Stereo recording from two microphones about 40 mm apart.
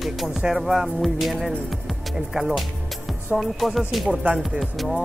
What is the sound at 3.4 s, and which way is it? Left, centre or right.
Music, centre.